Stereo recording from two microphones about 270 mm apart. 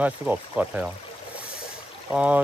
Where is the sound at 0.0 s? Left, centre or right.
Centre.